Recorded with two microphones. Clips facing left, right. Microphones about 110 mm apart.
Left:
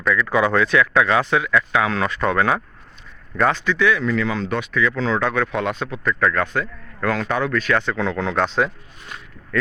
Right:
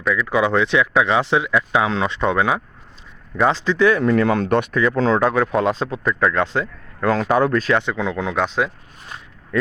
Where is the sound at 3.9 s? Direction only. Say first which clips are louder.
Right 4 dB; 45° right (ahead or behind).